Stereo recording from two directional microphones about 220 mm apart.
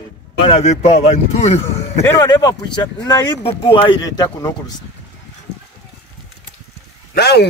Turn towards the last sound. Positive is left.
turn(degrees=45)  # may be behind; listen again after turning